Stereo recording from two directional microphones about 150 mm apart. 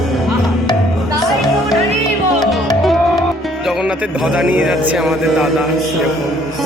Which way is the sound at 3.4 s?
5° right (ahead or behind).